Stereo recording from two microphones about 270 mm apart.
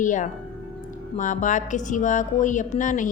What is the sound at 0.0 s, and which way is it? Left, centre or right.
A woman's voice, left.